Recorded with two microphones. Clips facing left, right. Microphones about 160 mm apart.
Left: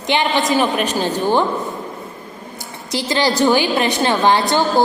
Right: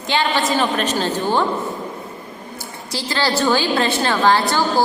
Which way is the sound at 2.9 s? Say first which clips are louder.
Left 3 dB; 20° left (ahead or behind).